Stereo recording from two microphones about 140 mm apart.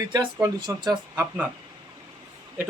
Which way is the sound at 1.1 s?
10° right (ahead or behind).